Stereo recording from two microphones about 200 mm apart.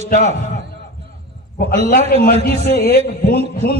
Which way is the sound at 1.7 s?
45° left (ahead or behind).